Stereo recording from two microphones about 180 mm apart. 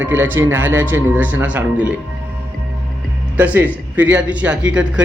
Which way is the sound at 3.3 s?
10° right (ahead or behind).